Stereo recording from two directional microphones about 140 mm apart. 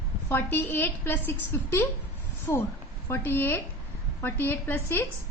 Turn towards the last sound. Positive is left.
turn(degrees=15)  # may be behind; listen again after turning